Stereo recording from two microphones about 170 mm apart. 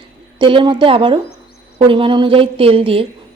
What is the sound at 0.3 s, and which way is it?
A woman's voice, 30° right (ahead or behind).